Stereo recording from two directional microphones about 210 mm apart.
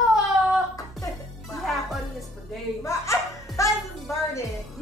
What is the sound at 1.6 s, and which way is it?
Music, centre (ahead or behind).